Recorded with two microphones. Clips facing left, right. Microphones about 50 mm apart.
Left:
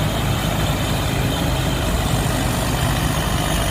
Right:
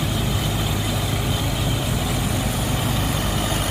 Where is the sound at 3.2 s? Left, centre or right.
Left.